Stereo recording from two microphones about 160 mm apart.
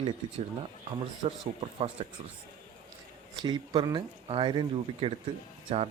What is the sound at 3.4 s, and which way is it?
Speech, 30° right (ahead or behind).